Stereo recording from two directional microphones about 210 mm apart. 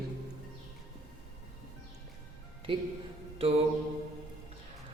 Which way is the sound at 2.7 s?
25° right (ahead or behind).